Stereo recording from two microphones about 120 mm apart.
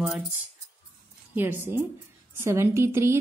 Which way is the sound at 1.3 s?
15° right (ahead or behind).